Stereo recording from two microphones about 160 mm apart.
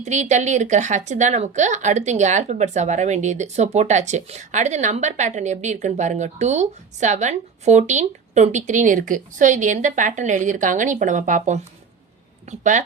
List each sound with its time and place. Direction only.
0.0 s a woman's voice: 45° right (ahead or behind)